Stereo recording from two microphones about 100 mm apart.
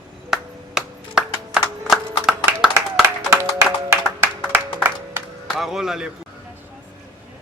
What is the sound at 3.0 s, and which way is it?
Music, 25° right (ahead or behind).